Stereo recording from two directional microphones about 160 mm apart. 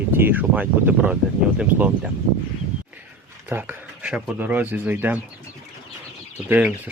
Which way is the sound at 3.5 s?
10° right (ahead or behind).